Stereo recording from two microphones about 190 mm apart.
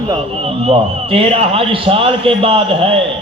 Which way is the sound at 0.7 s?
30° right (ahead or behind).